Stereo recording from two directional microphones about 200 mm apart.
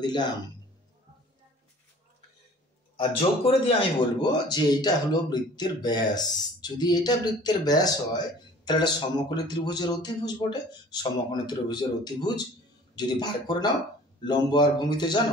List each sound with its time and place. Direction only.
0.0 s speech: 20° left (ahead or behind)
3.0 s speech: 25° left (ahead or behind)